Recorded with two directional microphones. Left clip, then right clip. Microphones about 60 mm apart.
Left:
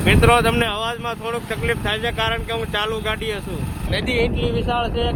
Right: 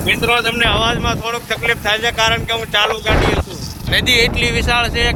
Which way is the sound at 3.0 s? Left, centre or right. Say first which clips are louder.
Right 8 dB; right.